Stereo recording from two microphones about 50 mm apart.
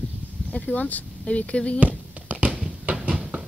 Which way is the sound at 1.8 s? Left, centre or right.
Right.